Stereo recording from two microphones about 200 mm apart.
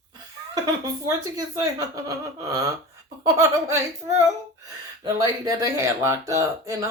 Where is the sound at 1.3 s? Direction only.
20° right (ahead or behind).